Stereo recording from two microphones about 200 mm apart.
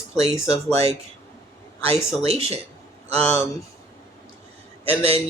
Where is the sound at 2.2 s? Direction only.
30° right (ahead or behind).